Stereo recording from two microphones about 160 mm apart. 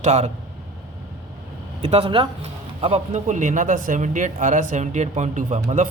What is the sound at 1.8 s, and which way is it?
A man's voice, 40° right (ahead or behind).